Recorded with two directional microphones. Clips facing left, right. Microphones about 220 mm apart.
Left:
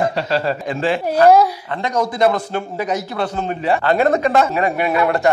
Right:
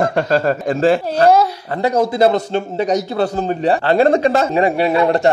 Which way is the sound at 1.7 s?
35° right (ahead or behind).